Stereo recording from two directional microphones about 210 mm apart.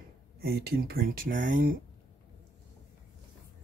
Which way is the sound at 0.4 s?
45° right (ahead or behind).